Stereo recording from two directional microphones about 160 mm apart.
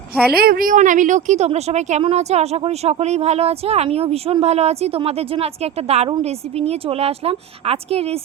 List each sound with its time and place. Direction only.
0.3 s a woman's voice: 65° right (ahead or behind); by 8.2 s 40° right (ahead or behind)